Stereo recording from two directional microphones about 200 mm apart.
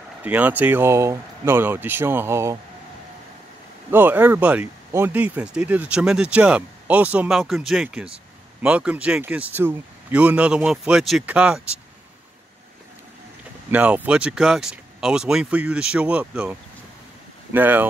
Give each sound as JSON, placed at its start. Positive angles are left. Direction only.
{"t": 0.2, "sound": "speech", "side_deg": -10}
{"t": 3.9, "sound": "speech", "side_deg": -10}
{"t": 13.7, "sound": "speech", "side_deg": -10}